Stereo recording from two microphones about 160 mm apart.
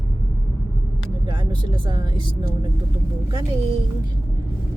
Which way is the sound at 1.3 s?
30° right (ahead or behind).